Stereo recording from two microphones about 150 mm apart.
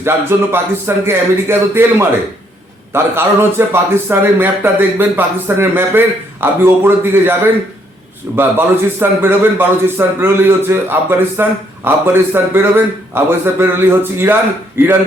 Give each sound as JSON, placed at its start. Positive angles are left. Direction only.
{"t": 0.0, "sound": "a man's voice", "side_deg": -15}